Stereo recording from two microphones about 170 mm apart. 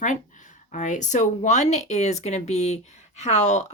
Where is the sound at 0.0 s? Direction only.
50° left (ahead or behind).